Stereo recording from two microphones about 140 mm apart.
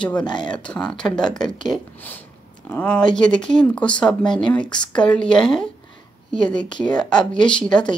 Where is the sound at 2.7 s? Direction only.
5° left (ahead or behind).